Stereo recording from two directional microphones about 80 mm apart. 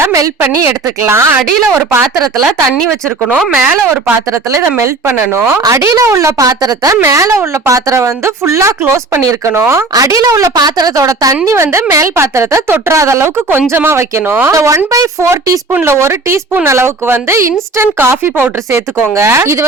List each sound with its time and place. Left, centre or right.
0.0 s a woman's voice: right
5.6 s a woman's voice: right
11.5 s a woman's voice: right
14.5 s a woman's voice: right